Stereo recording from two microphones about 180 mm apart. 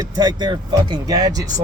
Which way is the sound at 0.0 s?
25° right (ahead or behind).